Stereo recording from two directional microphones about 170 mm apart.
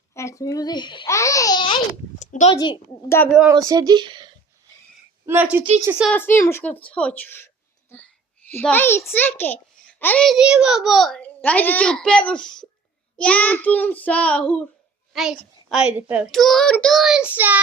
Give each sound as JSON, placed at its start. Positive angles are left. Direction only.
{"t": 0.1, "sound": "a child's voice", "side_deg": 15}
{"t": 2.1, "sound": "a sound", "side_deg": 45}
{"t": 2.5, "sound": "a child's voice", "side_deg": 30}
{"t": 3.5, "sound": "speech", "side_deg": -20}
{"t": 5.2, "sound": "a woman's voice", "side_deg": -10}
{"t": 6.1, "sound": "a child's voice", "side_deg": 10}
{"t": 16.3, "sound": "child singing", "side_deg": 0}